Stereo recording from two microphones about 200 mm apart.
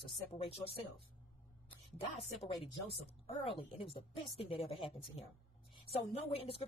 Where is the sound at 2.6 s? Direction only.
30° left (ahead or behind).